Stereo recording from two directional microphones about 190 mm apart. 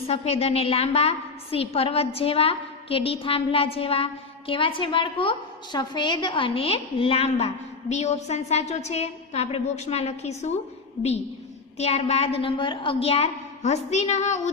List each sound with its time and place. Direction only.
0.1 s a woman's voice: 35° left (ahead or behind)
11.8 s a woman's voice: 35° left (ahead or behind)